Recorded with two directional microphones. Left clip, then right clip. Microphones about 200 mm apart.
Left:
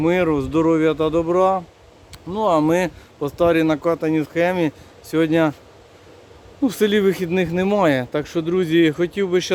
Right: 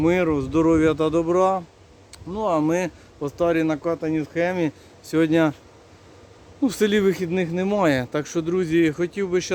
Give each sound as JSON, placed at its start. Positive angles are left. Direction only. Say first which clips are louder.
{"t": 0.0, "sound": "speech", "louder": "left 2 dB", "side_deg": -5}
{"t": 2.3, "sound": "speech", "louder": "left 4 dB", "side_deg": 20}
{"t": 5.0, "sound": "speech", "louder": "left 2 dB", "side_deg": 0}
{"t": 6.6, "sound": "speech", "louder": "left 2 dB", "side_deg": 0}